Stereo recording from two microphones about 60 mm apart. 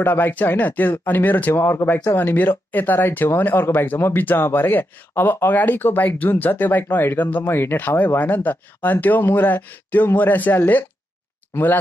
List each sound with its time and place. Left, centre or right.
0.0 s speech: left